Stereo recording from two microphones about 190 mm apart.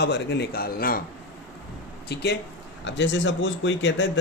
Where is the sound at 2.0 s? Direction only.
60° left (ahead or behind).